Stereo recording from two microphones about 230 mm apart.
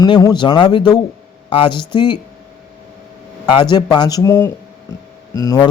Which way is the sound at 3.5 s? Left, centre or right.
Centre.